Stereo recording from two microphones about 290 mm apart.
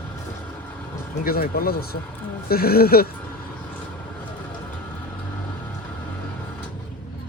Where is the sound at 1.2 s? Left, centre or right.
Left.